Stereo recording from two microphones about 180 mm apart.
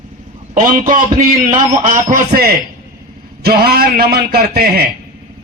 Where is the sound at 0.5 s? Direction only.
45° right (ahead or behind).